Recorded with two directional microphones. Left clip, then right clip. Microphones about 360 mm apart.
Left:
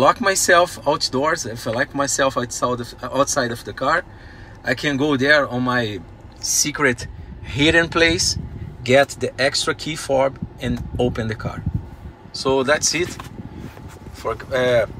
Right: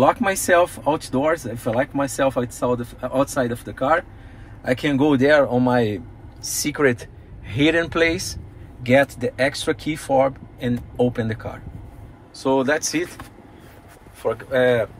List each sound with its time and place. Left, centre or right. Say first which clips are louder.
0.0 s speech: left 2 dB; centre
14.2 s speech: right 1 dB; centre